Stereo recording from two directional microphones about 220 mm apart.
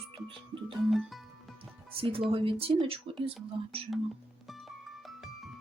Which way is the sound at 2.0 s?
25° right (ahead or behind).